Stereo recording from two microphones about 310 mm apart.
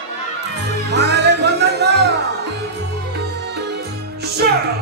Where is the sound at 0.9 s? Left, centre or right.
Right.